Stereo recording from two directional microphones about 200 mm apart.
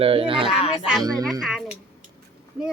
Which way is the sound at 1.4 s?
Centre (ahead or behind).